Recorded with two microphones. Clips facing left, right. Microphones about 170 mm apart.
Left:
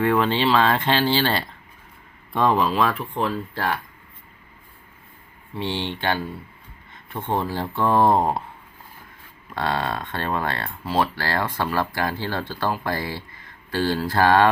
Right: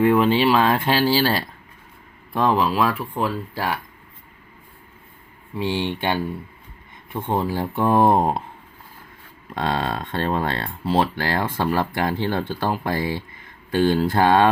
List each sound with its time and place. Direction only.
0.0 s speech: 10° right (ahead or behind)
5.5 s speech: 10° right (ahead or behind)
7.3 s speech: 15° right (ahead or behind)
9.6 s speech: 25° right (ahead or behind)